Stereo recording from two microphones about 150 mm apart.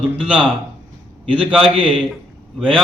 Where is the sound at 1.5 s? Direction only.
5° right (ahead or behind).